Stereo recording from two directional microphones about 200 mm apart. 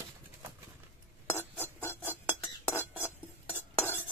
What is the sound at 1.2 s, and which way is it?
Cutlery, 10° left (ahead or behind).